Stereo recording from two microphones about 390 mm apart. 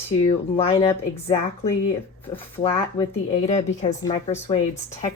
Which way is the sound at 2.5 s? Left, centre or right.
Centre.